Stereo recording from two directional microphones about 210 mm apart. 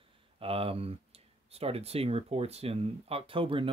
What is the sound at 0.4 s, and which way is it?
Speech, 25° right (ahead or behind).